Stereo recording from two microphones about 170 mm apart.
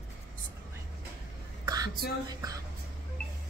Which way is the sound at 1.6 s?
20° right (ahead or behind).